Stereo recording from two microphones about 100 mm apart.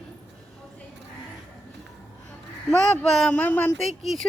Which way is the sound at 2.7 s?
10° left (ahead or behind).